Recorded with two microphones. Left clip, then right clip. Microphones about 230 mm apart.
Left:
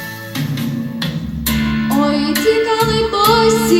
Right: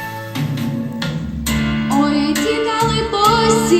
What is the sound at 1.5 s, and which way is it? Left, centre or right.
Music, left.